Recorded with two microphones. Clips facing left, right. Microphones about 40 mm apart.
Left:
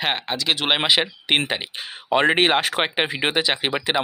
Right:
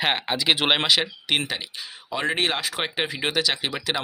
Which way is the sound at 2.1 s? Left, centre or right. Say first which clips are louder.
Left 7 dB; left.